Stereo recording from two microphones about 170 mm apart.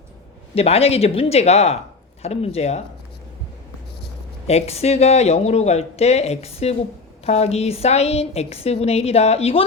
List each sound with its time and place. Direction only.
0.5 s a woman's voice: 35° left (ahead or behind)
4.4 s a woman's voice: 40° left (ahead or behind)